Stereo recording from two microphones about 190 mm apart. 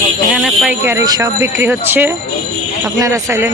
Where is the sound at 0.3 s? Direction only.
5° right (ahead or behind).